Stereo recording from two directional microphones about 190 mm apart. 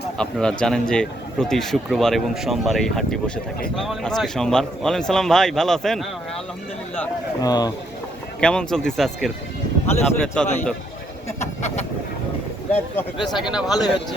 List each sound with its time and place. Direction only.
0.2 s a man's voice: 5° left (ahead or behind)
7.4 s speech: 20° left (ahead or behind)
8.4 s a man's voice: 5° left (ahead or behind)
13.1 s speech: 25° left (ahead or behind)
13.4 s a man's voice: 5° right (ahead or behind)
13.7 s speech: 20° left (ahead or behind)